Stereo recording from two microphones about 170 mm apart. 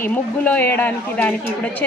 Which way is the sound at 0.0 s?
10° left (ahead or behind).